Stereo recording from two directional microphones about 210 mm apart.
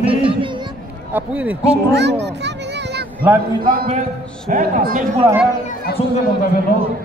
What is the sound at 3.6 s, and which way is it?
Speech, 25° right (ahead or behind).